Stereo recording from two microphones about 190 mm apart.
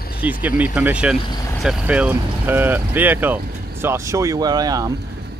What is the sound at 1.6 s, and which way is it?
Speech, 5° right (ahead or behind).